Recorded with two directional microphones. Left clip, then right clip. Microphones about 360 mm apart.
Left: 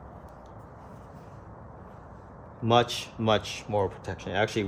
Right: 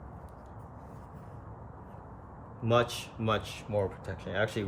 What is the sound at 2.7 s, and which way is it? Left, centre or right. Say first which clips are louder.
Speech: left 4 dB; centre.